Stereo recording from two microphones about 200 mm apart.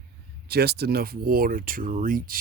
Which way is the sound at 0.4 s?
50° right (ahead or behind).